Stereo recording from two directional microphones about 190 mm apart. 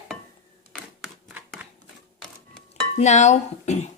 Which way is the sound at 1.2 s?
Centre (ahead or behind).